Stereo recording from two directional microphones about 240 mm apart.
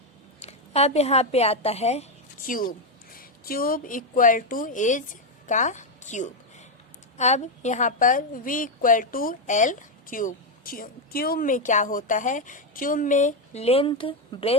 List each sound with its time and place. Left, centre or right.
0.4 s a woman's voice: left
2.5 s a woman's voice: left